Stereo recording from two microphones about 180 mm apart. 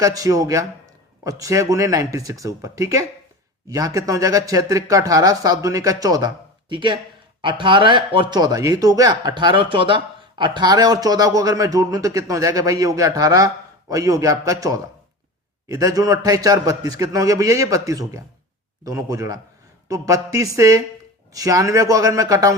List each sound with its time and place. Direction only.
0.0 s speech: 20° right (ahead or behind)